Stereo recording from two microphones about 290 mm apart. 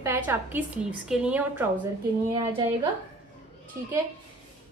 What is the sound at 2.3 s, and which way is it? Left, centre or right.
Speech, centre.